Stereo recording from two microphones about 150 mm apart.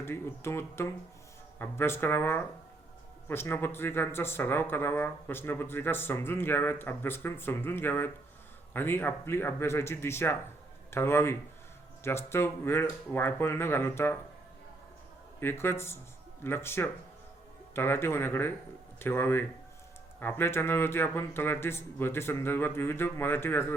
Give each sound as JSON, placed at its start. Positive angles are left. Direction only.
{"t": 0.0, "sound": "speech", "side_deg": 15}
{"t": 15.4, "sound": "speech", "side_deg": 15}